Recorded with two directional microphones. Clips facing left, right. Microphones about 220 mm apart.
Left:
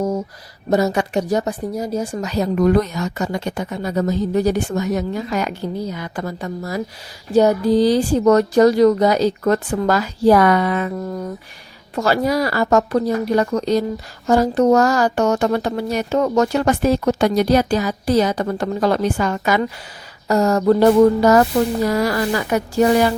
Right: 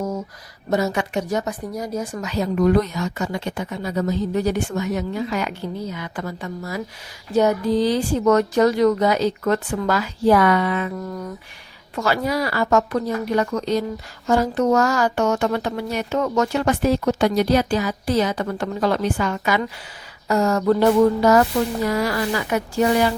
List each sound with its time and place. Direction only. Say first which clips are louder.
0.7 s a woman's voice: left 4 dB; 40° left (ahead or behind)